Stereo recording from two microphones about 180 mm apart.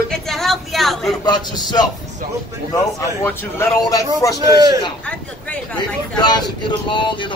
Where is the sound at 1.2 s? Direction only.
25° left (ahead or behind).